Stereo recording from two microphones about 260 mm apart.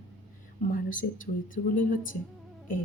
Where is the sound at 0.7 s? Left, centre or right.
Left.